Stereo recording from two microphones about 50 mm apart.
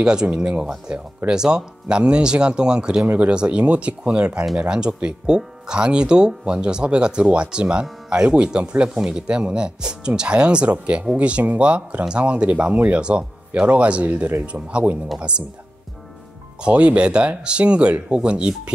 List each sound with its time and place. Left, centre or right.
0.0 s speech: centre
16.6 s speech: right